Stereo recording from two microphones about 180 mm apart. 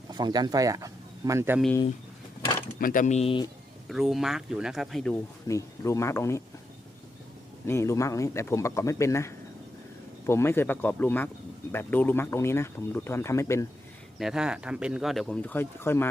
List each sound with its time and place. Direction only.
0.1 s speech: 25° right (ahead or behind)
2.7 s speech: 50° left (ahead or behind); by 3.5 s 30° left (ahead or behind)
3.8 s speech: centre (ahead or behind)
5.5 s speech: 15° left (ahead or behind)
7.7 s speech: 15° left (ahead or behind)
14.2 s speech: 5° right (ahead or behind); by 16.0 s 15° left (ahead or behind)